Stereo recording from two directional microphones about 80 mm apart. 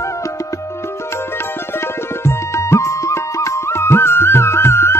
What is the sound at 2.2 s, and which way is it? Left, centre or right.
Music, left.